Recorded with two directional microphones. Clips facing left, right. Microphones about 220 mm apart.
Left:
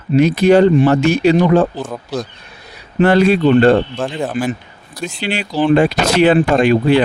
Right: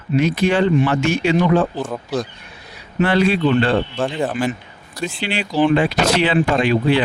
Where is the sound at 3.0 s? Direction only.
45° left (ahead or behind).